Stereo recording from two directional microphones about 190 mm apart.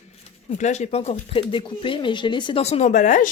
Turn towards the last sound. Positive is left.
turn(degrees=40)  # may be behind; listen again after turning